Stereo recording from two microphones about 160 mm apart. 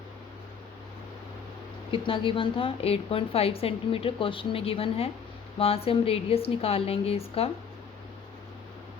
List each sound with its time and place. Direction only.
1.9 s a woman's voice: 35° left (ahead or behind)